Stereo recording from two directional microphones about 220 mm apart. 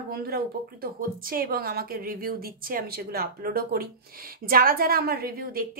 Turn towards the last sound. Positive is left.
turn(degrees=-45)  # may be behind; listen again after turning